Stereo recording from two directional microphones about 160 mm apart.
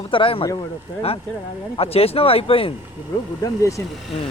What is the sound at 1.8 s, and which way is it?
Speech, 40° left (ahead or behind).